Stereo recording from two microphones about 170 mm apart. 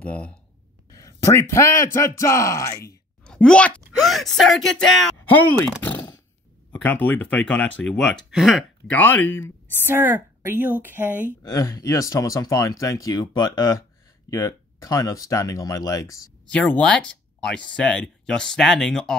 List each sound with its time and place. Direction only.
0.0 s speech: 5° left (ahead or behind)
0.9 s speech: 20° left (ahead or behind)
3.3 s speech: 5° left (ahead or behind)
5.8 s a sound: 10° left (ahead or behind)
6.7 s speech: 10° left (ahead or behind)
9.8 s a woman's voice: 15° right (ahead or behind)
11.2 s speech: 20° left (ahead or behind)
16.5 s speech: 5° left (ahead or behind)